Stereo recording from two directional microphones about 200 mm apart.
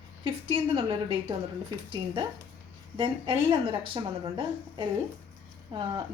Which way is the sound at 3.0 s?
25° right (ahead or behind).